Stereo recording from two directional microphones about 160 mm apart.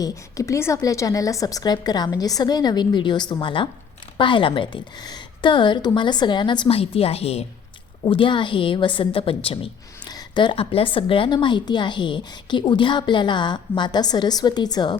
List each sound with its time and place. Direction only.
0.0 s a woman's voice: 20° left (ahead or behind)